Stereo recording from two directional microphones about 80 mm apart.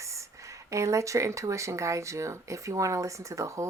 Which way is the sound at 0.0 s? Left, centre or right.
Right.